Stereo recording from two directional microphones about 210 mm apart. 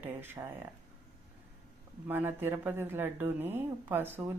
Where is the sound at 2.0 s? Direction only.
10° right (ahead or behind).